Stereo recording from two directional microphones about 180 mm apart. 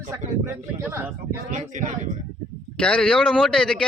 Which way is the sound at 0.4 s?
15° right (ahead or behind).